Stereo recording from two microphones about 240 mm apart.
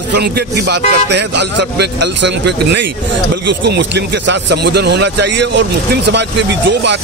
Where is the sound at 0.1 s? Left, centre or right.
Right.